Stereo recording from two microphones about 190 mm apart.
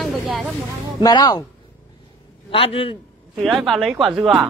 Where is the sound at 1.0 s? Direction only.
20° left (ahead or behind).